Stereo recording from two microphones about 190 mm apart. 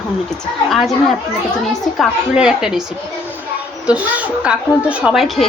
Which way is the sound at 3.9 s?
5° right (ahead or behind).